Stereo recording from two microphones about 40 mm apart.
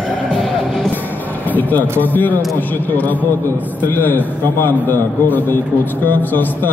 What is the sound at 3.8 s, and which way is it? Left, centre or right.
A man's voice, left.